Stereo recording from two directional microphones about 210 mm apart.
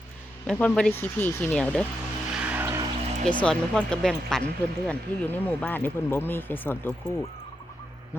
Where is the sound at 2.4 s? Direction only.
10° right (ahead or behind).